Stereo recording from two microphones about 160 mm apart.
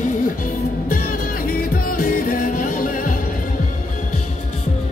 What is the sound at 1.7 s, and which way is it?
Music, 65° left (ahead or behind).